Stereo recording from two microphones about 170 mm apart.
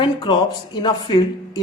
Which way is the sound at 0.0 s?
25° left (ahead or behind).